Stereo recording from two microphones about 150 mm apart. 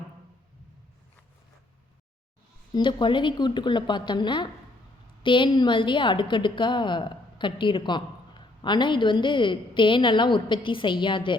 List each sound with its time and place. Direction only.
2.7 s a woman's voice: 30° left (ahead or behind)